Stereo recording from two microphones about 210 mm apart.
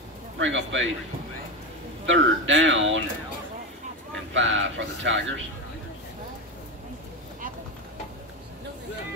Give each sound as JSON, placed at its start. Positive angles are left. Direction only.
{"t": 0.4, "sound": "speech", "side_deg": -60}
{"t": 2.0, "sound": "speech", "side_deg": -65}
{"t": 4.3, "sound": "speech", "side_deg": -65}